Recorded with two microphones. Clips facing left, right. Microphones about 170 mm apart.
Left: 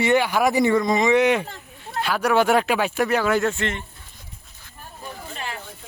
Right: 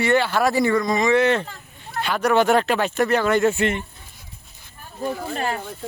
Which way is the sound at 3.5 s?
10° right (ahead or behind).